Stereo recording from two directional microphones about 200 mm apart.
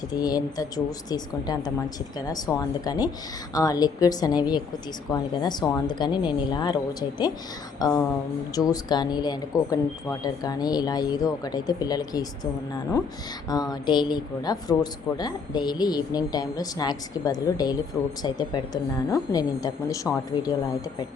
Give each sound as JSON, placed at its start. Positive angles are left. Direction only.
{"t": 0.1, "sound": "speech", "side_deg": 20}
{"t": 7.8, "sound": "speech", "side_deg": 20}
{"t": 13.5, "sound": "speech", "side_deg": 20}